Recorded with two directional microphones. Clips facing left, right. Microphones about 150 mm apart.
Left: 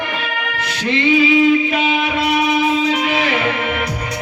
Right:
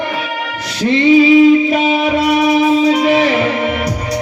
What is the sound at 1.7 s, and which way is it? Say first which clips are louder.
Music: right 5 dB; 40° right (ahead or behind).